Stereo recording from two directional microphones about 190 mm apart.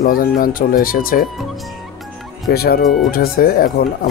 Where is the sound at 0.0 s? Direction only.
45° left (ahead or behind).